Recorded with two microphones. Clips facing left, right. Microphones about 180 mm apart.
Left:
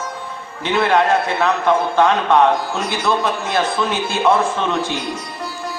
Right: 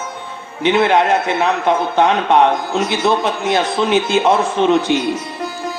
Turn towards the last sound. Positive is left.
turn(degrees=-20)  # may be behind; listen again after turning